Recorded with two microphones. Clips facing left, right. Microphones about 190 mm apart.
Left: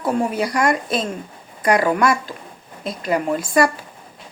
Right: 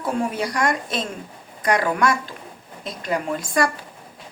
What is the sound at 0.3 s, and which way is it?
Speech, 5° left (ahead or behind).